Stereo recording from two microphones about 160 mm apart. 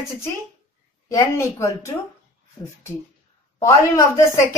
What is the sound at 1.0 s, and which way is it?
Speech, 20° left (ahead or behind).